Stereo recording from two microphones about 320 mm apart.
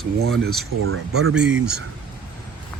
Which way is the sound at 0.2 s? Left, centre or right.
Right.